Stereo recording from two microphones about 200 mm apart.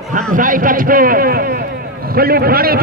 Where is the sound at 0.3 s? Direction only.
45° right (ahead or behind).